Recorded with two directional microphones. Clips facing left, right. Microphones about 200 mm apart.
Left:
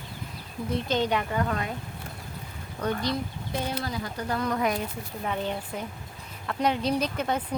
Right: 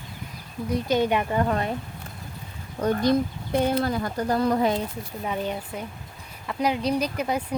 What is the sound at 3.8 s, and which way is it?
Speech, 55° right (ahead or behind).